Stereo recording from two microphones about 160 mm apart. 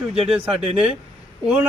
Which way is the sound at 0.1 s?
40° right (ahead or behind).